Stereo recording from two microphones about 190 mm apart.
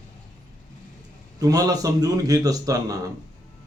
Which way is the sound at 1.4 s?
20° right (ahead or behind).